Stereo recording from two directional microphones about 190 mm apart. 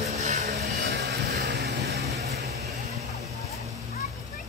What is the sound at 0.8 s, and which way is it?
Music, 60° right (ahead or behind).